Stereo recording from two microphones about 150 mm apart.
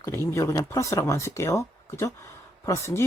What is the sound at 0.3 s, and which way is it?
Speech, 20° left (ahead or behind).